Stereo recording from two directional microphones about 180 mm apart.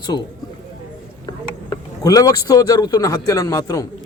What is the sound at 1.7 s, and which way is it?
Speech, 20° left (ahead or behind).